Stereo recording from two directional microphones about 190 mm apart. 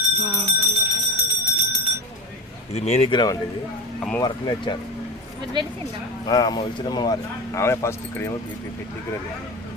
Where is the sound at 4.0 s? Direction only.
5° left (ahead or behind).